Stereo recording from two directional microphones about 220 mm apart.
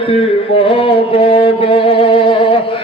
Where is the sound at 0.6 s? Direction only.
25° left (ahead or behind).